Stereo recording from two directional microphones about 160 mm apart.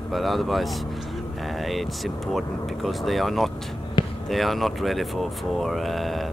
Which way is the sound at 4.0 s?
30° left (ahead or behind).